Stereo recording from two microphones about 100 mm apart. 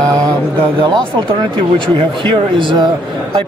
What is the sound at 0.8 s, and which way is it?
Speech, 50° right (ahead or behind).